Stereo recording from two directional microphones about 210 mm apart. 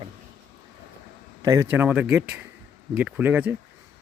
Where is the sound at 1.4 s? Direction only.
15° right (ahead or behind).